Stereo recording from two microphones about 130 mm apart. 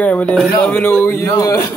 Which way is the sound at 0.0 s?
10° left (ahead or behind).